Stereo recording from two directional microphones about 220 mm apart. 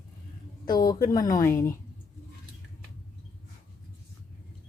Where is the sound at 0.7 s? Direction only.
15° left (ahead or behind).